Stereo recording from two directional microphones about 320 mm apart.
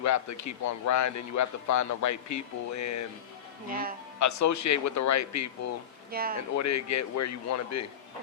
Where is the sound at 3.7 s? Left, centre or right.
Right.